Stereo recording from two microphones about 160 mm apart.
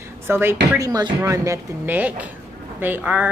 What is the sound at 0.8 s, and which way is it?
A woman's voice, 25° right (ahead or behind).